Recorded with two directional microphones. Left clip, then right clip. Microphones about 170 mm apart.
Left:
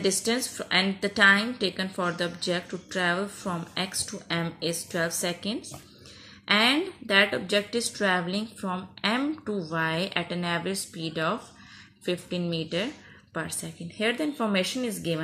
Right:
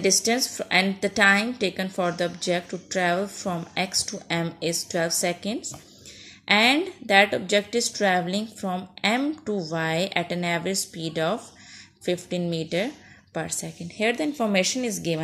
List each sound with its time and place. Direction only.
0.0 s a woman's voice: 25° right (ahead or behind)